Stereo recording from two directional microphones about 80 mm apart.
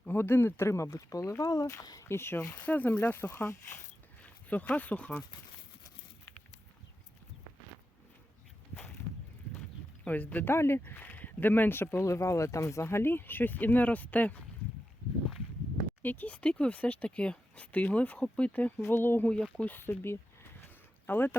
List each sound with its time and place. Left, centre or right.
0.1 s speech: left
2.0 s speech: left
2.6 s speech: left
4.2 s speech: centre
9.6 s clip-clop: centre
10.5 s speech: left
16.0 s speech: left
18.8 s speech: left
19.3 s speech: centre